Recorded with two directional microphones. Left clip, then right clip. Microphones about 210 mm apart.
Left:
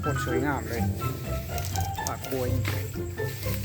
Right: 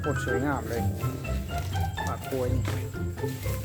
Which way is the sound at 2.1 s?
10° left (ahead or behind).